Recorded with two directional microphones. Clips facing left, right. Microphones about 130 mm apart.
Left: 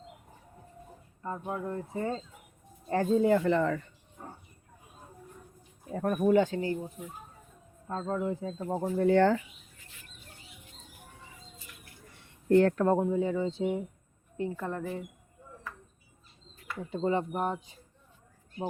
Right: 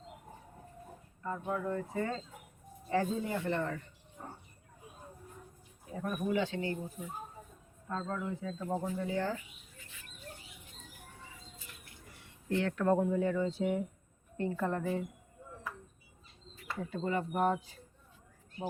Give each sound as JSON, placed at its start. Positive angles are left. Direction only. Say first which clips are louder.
{"t": 1.2, "sound": "speech", "louder": "left 1 dB", "side_deg": 25}
{"t": 2.9, "sound": "speech", "louder": "left 6 dB", "side_deg": 50}
{"t": 3.2, "sound": "speech", "louder": "left 10 dB", "side_deg": 90}
{"t": 6.0, "sound": "speech", "louder": "left 8 dB", "side_deg": 55}
{"t": 7.0, "sound": "speech", "louder": "left 1 dB", "side_deg": 10}
{"t": 7.9, "sound": "speech", "louder": "left 5 dB", "side_deg": 35}
{"t": 9.0, "sound": "speech", "louder": "left 11 dB", "side_deg": 70}
{"t": 12.5, "sound": "speech", "louder": "left 11 dB", "side_deg": 45}
{"t": 12.8, "sound": "speech", "louder": "left 3 dB", "side_deg": 25}
{"t": 14.3, "sound": "a woman's voice", "louder": "even", "side_deg": 10}
{"t": 16.9, "sound": "speech", "louder": "left 5 dB", "side_deg": 25}